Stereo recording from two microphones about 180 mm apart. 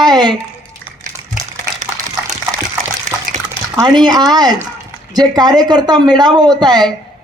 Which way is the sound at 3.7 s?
20° right (ahead or behind).